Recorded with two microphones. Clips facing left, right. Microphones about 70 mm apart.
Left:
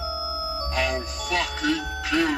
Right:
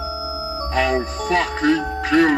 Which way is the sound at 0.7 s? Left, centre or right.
Right.